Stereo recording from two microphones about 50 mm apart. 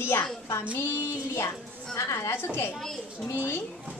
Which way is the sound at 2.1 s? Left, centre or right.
Left.